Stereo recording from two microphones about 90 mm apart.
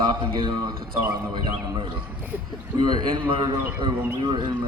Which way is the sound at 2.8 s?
65° right (ahead or behind).